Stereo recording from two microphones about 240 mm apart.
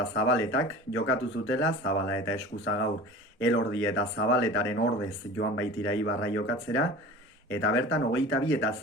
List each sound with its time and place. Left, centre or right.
0.1 s speech: left